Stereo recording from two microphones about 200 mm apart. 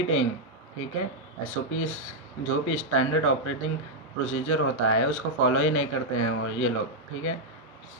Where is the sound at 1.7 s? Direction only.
90° left.